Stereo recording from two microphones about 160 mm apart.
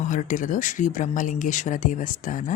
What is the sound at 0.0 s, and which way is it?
Speech, 50° left (ahead or behind).